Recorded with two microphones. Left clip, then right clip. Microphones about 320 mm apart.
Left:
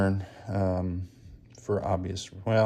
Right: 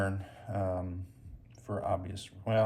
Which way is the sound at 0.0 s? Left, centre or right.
Centre.